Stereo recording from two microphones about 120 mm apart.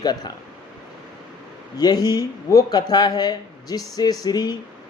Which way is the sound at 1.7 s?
35° left (ahead or behind).